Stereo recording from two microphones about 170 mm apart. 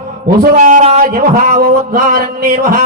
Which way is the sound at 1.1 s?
60° right (ahead or behind).